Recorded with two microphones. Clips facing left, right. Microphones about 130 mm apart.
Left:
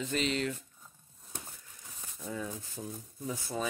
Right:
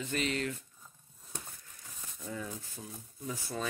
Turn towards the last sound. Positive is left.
turn(degrees=15)  # may be behind; listen again after turning